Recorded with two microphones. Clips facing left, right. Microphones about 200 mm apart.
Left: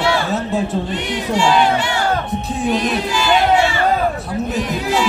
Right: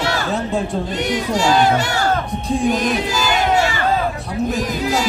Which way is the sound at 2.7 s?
45° right (ahead or behind).